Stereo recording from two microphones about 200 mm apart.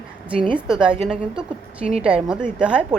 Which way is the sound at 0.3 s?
25° right (ahead or behind).